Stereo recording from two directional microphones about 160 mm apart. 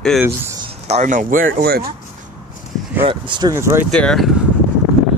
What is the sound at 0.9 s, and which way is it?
Speech, 50° right (ahead or behind).